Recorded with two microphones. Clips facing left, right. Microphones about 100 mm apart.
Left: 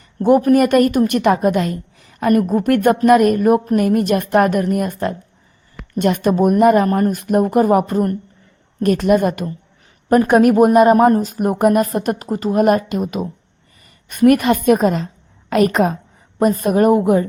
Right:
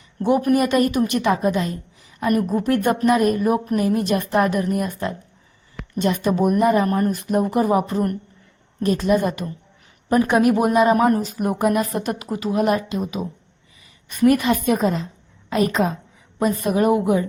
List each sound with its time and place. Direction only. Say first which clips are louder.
0.2 s a woman's voice: left 6 dB; 50° left (ahead or behind)